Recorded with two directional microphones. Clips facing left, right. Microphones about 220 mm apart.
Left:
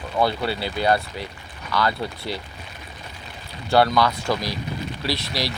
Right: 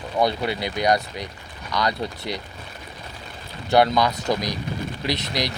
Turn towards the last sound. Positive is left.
turn(degrees=-20)  # may be behind; listen again after turning